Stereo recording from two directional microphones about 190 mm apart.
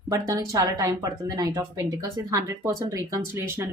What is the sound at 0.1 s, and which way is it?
Speech, 20° right (ahead or behind).